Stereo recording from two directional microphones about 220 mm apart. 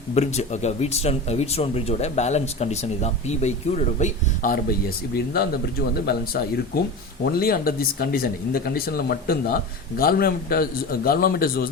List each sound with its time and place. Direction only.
0.1 s speech: 30° left (ahead or behind)